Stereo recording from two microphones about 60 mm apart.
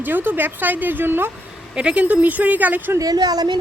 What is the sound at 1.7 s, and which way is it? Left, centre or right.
Speech, centre.